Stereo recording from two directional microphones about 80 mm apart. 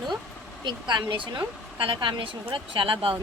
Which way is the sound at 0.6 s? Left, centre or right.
Right.